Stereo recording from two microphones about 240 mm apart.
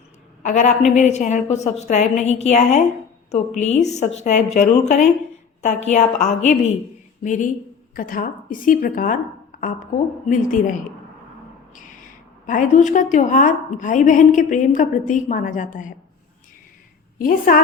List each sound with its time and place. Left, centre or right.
0.4 s a woman's voice: left
12.5 s a woman's voice: left
17.2 s a woman's voice: left